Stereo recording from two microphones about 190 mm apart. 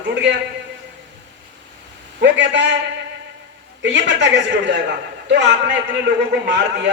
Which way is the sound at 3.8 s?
70° right (ahead or behind).